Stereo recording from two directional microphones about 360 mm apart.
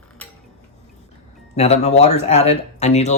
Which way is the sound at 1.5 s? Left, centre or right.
Centre.